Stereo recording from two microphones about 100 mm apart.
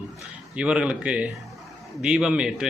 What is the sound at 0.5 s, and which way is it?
A man's voice, 10° right (ahead or behind).